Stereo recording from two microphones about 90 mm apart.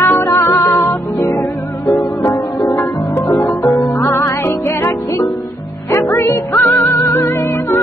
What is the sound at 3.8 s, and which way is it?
Music, 35° left (ahead or behind).